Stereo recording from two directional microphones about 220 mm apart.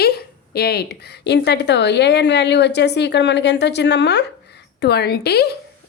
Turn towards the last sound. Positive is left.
turn(degrees=45)  # may be behind; listen again after turning